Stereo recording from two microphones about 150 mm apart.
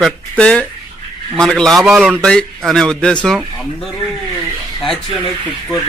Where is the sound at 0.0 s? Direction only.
5° left (ahead or behind).